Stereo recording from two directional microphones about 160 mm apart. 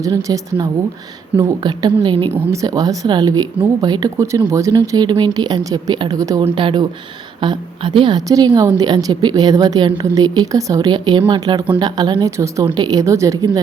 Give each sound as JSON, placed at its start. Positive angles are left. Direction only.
{"t": 0.0, "sound": "a woman's voice", "side_deg": -20}
{"t": 2.3, "sound": "a woman's voice", "side_deg": -20}
{"t": 6.4, "sound": "a woman's voice", "side_deg": -30}